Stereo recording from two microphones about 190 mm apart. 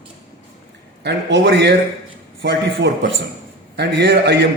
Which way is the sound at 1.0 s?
65° right (ahead or behind).